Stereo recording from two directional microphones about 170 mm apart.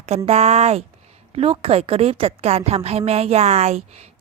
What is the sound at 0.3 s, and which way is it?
A woman's voice, 40° right (ahead or behind).